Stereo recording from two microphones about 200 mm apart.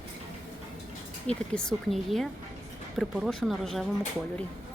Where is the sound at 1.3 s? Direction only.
5° left (ahead or behind).